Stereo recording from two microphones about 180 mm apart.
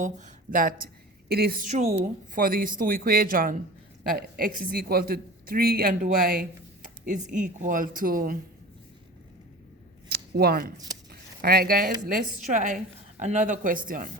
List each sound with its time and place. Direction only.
0.0 s a woman's voice: 45° right (ahead or behind)
1.6 s a woman's voice: 40° right (ahead or behind); by 6.5 s 55° right (ahead or behind)
7.0 s a woman's voice: 45° right (ahead or behind)
10.1 s scissors: 60° right (ahead or behind)
11.1 s a sound: 60° right (ahead or behind)
12.5 s a woman's voice: 45° right (ahead or behind)